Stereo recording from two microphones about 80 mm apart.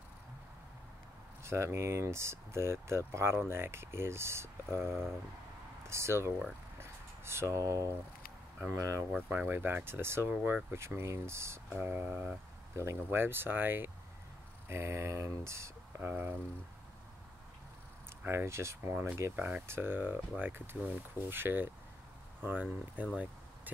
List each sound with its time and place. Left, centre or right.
1.4 s speech: right
5.9 s speech: right
6.8 s a sound: right
8.6 s speech: right
9.1 s speech: right
10.8 s speech: right
11.8 s speech: right
12.7 s speech: right
16.0 s speech: right
18.3 s speech: right
19.3 s speech: right